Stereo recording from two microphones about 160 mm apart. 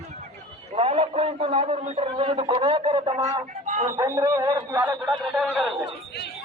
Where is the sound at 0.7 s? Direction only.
40° right (ahead or behind).